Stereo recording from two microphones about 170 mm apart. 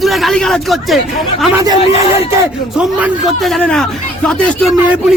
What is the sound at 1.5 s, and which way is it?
Speech, 20° right (ahead or behind).